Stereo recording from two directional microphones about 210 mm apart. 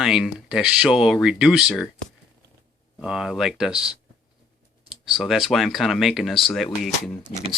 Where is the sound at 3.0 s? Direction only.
5° right (ahead or behind).